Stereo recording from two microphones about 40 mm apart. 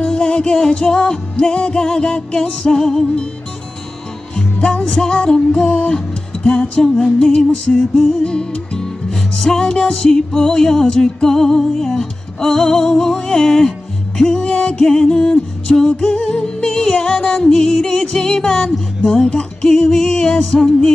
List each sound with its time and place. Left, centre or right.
0.0 s music: left
4.9 s music: left
7.7 s music: centre
8.1 s music: left